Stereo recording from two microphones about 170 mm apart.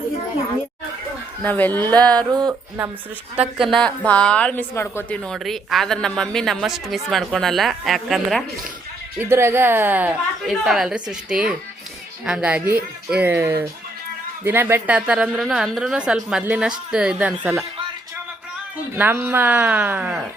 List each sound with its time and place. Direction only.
1.4 s speech: 10° left (ahead or behind)
2.1 s a sound: 25° right (ahead or behind)
3.3 s a woman's voice: 5° right (ahead or behind)
9.1 s a woman's voice: 15° right (ahead or behind)
18.9 s a woman's voice: 10° right (ahead or behind)